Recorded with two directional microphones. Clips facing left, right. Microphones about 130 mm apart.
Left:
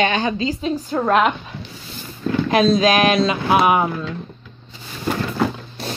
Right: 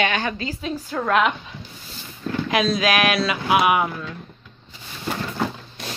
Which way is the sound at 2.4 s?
30° left (ahead or behind).